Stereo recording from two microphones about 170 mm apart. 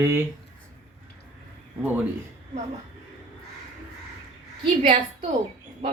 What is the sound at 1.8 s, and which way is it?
Speech, 10° right (ahead or behind).